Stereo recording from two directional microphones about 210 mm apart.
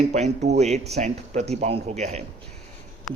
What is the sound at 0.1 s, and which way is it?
Speech, 35° right (ahead or behind).